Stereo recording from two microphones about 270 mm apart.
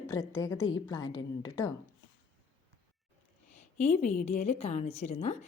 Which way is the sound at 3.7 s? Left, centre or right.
Left.